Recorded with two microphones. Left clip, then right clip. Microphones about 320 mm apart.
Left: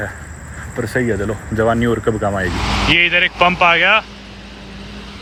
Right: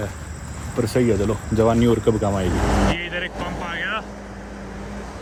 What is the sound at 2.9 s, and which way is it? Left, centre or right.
Speech, centre.